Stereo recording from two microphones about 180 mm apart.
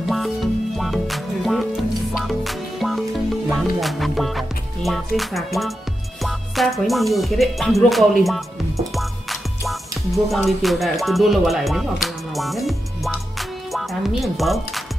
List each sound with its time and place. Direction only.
0.1 s music: centre (ahead or behind)